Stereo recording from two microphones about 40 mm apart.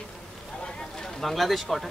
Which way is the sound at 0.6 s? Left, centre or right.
Centre.